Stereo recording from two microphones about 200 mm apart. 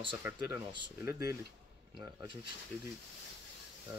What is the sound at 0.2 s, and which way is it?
Speech, 15° right (ahead or behind).